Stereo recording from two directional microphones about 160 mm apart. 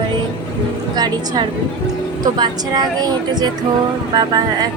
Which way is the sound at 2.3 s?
25° right (ahead or behind).